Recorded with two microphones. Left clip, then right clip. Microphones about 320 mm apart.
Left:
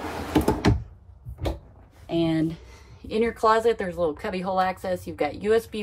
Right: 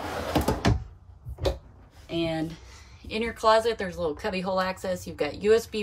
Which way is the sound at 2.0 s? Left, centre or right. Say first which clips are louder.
Left 5 dB; centre.